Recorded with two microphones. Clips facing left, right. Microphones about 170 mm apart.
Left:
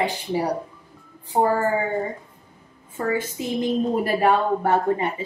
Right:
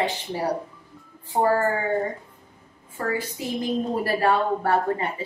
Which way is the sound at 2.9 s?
25° left (ahead or behind).